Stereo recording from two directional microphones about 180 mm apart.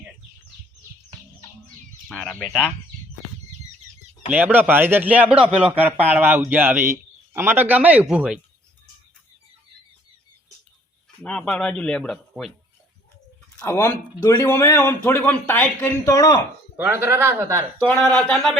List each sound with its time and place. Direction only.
2.0 s speech: 10° left (ahead or behind)
4.3 s speech: 10° right (ahead or behind)
11.2 s speech: 5° left (ahead or behind)
13.6 s speech: 15° left (ahead or behind)
16.7 s speech: 10° right (ahead or behind)
18.0 s speech: 5° left (ahead or behind)